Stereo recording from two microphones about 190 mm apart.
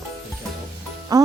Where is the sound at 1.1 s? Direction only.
20° right (ahead or behind).